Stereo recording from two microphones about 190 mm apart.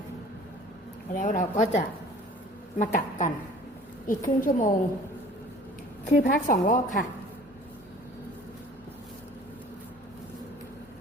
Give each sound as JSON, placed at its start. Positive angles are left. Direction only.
{"t": 1.1, "sound": "a woman's voice", "side_deg": 45}
{"t": 6.1, "sound": "a woman's voice", "side_deg": 45}